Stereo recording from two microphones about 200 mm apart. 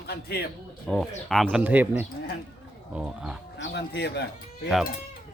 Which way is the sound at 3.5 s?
60° left (ahead or behind).